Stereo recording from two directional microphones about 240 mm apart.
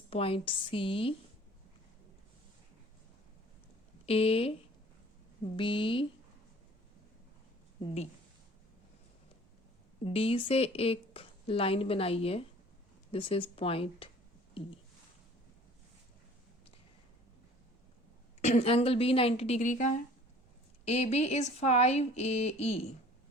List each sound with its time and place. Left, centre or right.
0.1 s a woman's voice: left
4.0 s a woman's voice: left
5.5 s a woman's voice: left
10.0 s a woman's voice: left
18.4 s a woman's voice: left